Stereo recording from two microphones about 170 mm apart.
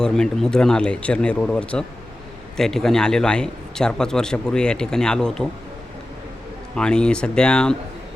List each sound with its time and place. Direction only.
0.0 s a man's voice: 5° left (ahead or behind)
6.7 s a man's voice: 5° left (ahead or behind)